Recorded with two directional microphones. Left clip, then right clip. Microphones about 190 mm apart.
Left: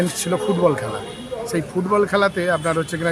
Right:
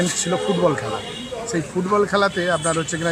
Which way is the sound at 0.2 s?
10° left (ahead or behind).